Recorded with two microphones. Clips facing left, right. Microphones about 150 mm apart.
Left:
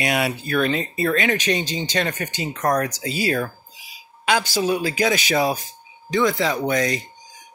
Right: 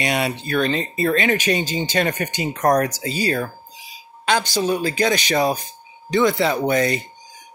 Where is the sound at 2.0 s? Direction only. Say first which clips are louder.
Right 3 dB; 55° right (ahead or behind).